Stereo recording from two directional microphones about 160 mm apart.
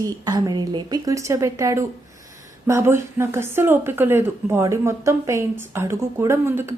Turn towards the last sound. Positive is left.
turn(degrees=-15)  # may be behind; listen again after turning